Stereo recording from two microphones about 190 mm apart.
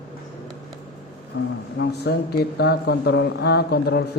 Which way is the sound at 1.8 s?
60° left (ahead or behind).